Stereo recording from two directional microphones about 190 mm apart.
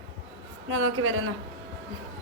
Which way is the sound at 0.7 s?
90° right.